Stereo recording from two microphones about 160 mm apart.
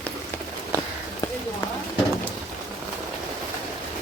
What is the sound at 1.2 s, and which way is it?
Run, 20° left (ahead or behind).